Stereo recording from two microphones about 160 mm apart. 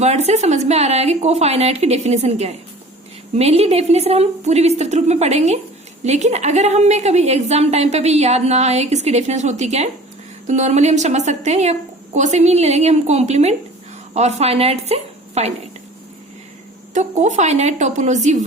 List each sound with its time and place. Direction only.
0.0 s a woman's voice: 45° right (ahead or behind)
16.9 s a woman's voice: 50° right (ahead or behind)